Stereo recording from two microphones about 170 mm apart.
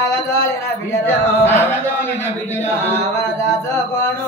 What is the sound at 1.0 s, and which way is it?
Music, 10° left (ahead or behind).